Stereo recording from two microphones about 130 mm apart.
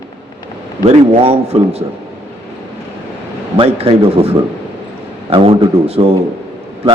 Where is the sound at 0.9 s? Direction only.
50° right (ahead or behind).